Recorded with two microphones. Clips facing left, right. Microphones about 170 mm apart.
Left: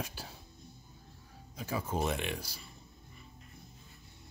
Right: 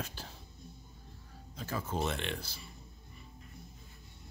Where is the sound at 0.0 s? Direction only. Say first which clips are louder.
Left 1 dB; 10° left (ahead or behind).